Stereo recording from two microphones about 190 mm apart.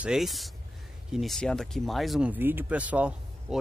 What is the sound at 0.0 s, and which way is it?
Speech, centre (ahead or behind).